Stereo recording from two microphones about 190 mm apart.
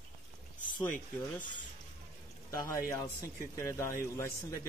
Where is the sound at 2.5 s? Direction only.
15° left (ahead or behind).